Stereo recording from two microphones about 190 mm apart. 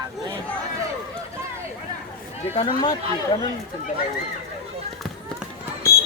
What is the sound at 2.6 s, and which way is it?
Speech, 25° left (ahead or behind).